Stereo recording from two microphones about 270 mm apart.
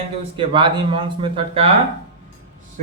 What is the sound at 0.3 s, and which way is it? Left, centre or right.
Speech, centre.